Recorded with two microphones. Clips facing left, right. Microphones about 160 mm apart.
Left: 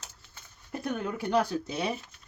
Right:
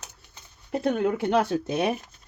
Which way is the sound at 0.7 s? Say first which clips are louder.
Right 8 dB; 80° right.